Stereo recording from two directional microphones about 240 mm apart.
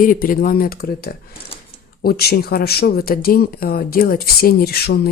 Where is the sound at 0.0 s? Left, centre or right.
Left.